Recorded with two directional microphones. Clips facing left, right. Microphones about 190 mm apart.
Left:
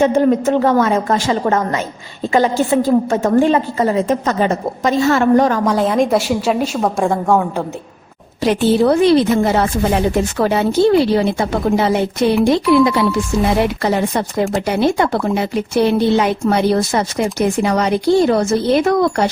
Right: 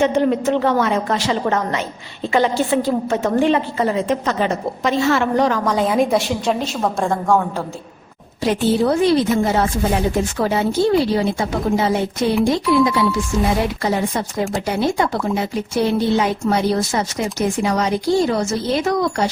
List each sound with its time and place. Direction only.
0.0 s a woman's voice: 50° left (ahead or behind)
5.6 s a woman's voice: centre (ahead or behind)
8.4 s speech: 70° left (ahead or behind)